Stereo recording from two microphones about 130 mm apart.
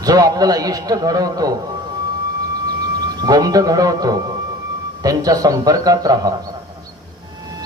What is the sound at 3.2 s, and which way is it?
A man's voice, 30° right (ahead or behind).